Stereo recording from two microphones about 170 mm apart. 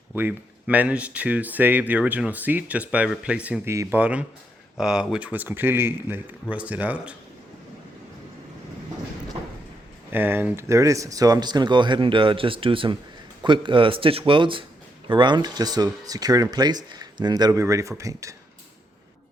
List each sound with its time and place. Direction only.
0.1 s speech: 10° right (ahead or behind)
10.1 s speech: 10° right (ahead or behind)